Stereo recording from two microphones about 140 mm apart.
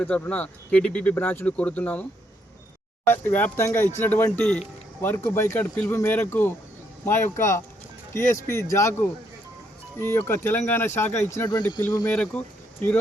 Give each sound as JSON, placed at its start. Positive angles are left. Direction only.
{"t": 0.0, "sound": "speech", "side_deg": 10}
{"t": 3.1, "sound": "speech", "side_deg": 15}